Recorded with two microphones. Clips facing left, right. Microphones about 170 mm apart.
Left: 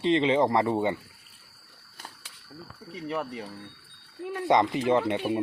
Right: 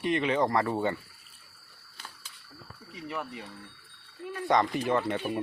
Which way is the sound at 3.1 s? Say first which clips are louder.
Left 5 dB; 40° left (ahead or behind).